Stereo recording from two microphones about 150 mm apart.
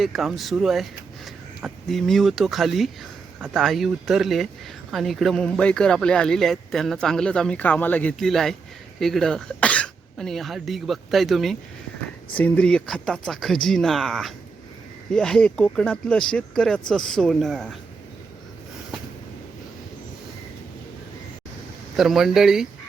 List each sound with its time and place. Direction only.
0.0 s speech: centre (ahead or behind)
21.9 s speech: centre (ahead or behind)